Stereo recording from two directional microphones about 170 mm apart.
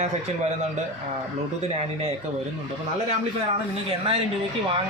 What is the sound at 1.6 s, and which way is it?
Speech, 35° right (ahead or behind).